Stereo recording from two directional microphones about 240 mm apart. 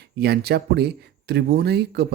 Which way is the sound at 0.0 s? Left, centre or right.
Right.